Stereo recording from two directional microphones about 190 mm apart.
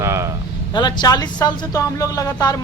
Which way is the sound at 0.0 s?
15° right (ahead or behind).